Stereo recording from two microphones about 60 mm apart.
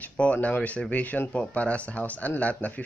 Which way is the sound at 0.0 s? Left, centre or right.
Left.